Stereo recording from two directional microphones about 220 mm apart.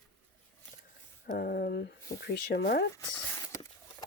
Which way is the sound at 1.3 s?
45° left (ahead or behind).